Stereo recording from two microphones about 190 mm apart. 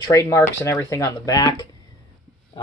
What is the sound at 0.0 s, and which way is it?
Speech, 15° left (ahead or behind).